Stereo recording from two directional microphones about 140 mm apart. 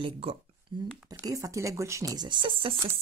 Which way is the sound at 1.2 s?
25° right (ahead or behind).